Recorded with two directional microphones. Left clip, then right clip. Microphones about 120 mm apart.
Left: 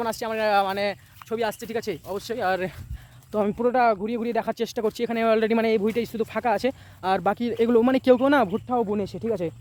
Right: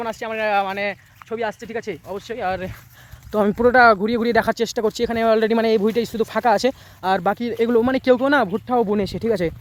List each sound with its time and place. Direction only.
0.0 s speech: 15° left (ahead or behind)
1.2 s speech: 5° right (ahead or behind)
3.5 s speech: 55° right (ahead or behind)
4.5 s speech: 30° right (ahead or behind)
7.0 s speech: 10° right (ahead or behind)
8.4 s speech: 25° right (ahead or behind)